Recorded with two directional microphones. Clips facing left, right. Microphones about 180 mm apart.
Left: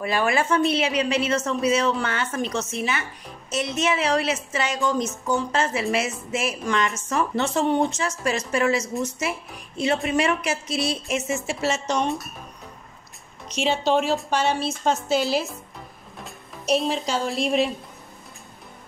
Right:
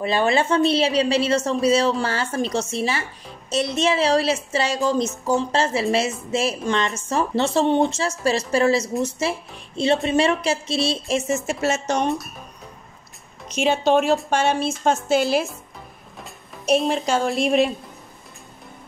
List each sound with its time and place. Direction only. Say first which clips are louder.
0.0 s a woman's voice: right 3 dB; 25° right (ahead or behind); by 12.0 s 45° right (ahead or behind)
13.5 s speech: right 3 dB; 50° right (ahead or behind)
16.6 s a woman's voice: right 3 dB; 55° right (ahead or behind)